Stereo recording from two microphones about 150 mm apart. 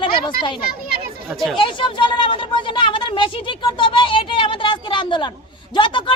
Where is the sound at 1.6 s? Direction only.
35° left (ahead or behind).